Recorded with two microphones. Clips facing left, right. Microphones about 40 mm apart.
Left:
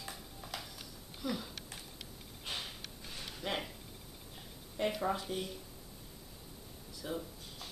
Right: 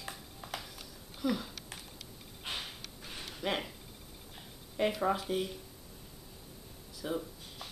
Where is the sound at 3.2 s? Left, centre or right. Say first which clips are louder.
Right 4 dB; centre.